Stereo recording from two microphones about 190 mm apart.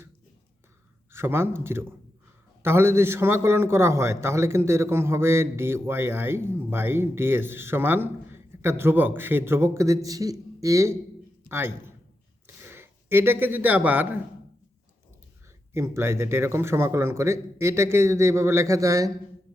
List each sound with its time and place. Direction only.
1.1 s a man's voice: 15° right (ahead or behind)
15.7 s a man's voice: 15° right (ahead or behind)